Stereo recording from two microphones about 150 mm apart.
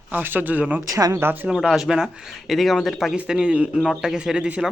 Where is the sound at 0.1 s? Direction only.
10° right (ahead or behind).